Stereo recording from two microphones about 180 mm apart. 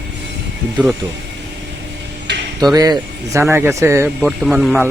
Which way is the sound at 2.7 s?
20° right (ahead or behind).